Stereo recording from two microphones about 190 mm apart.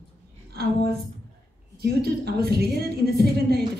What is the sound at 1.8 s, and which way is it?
A woman's voice, 55° right (ahead or behind).